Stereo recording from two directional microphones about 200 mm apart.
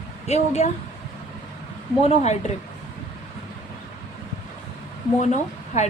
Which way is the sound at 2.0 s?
35° left (ahead or behind).